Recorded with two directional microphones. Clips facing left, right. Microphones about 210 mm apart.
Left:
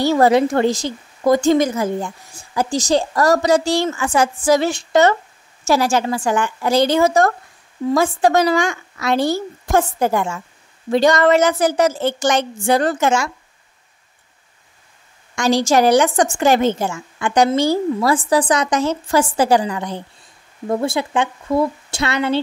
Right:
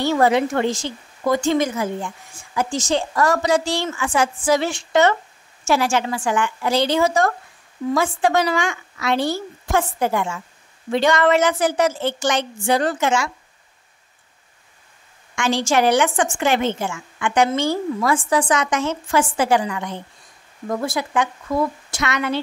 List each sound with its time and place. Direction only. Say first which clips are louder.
0.0 s a woman's voice: left 4 dB; 35° left (ahead or behind)
15.3 s a woman's voice: left 4 dB; 40° left (ahead or behind)